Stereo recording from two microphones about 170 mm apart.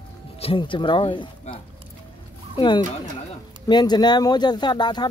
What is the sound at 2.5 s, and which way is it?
Speech, 25° left (ahead or behind).